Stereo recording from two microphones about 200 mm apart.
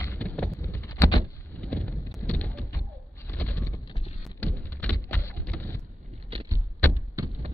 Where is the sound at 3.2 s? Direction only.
10° left (ahead or behind).